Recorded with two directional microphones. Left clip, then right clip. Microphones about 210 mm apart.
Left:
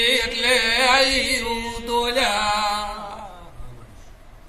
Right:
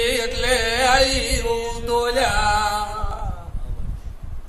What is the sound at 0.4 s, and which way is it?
Music, 15° right (ahead or behind).